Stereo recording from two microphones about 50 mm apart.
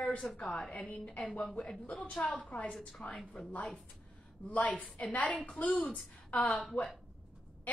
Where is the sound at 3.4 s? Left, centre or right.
Centre.